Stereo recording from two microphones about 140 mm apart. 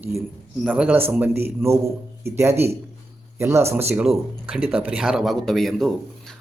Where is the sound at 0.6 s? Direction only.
10° right (ahead or behind).